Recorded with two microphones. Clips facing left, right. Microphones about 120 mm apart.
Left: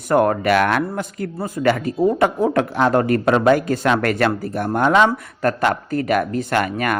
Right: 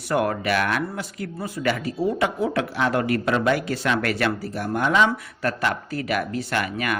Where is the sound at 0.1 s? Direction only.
45° left (ahead or behind).